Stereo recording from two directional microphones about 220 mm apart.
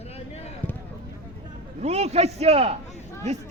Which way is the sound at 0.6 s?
10° left (ahead or behind).